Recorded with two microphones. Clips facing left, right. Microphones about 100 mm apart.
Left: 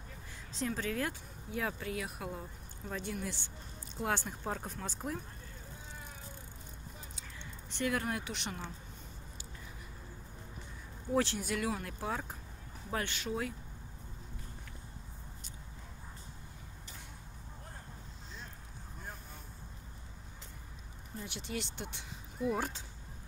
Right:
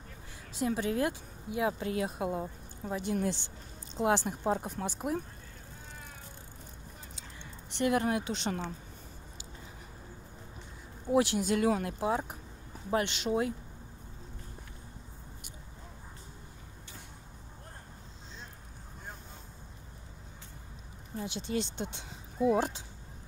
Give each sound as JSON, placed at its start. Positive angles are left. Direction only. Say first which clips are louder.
{"t": 0.5, "sound": "speech", "louder": "right 5 dB", "side_deg": -15}
{"t": 7.7, "sound": "speech", "louder": "right 6 dB", "side_deg": -20}
{"t": 11.1, "sound": "speech", "louder": "right 5 dB", "side_deg": -15}
{"t": 21.2, "sound": "speech", "louder": "right 7 dB", "side_deg": -30}